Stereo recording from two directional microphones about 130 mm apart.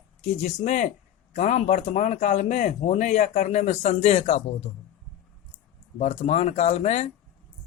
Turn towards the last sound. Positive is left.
turn(degrees=60)  # may be behind; listen again after turning